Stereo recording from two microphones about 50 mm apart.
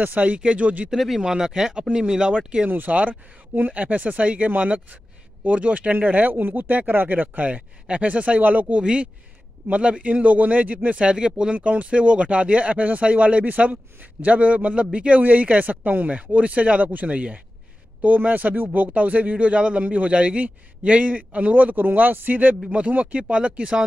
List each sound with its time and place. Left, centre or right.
0.0 s a man's voice: right
0.8 s speech: centre
1.2 s speech: centre
2.6 s a man's voice: right; by 11.5 s centre
11.5 s a man's voice: right